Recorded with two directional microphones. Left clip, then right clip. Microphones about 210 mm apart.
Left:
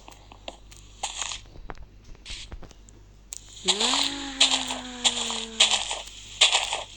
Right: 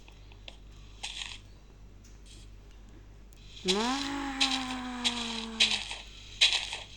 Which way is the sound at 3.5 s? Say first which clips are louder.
Left 6 dB; 45° left (ahead or behind).